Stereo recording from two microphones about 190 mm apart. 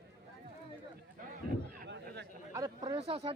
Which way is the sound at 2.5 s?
20° right (ahead or behind).